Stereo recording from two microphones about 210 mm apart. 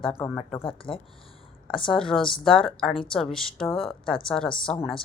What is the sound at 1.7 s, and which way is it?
A woman's voice, 5° left (ahead or behind).